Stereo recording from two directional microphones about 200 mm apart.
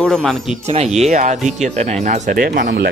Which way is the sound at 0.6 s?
30° right (ahead or behind).